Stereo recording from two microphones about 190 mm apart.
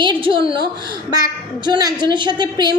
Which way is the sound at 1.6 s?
20° right (ahead or behind).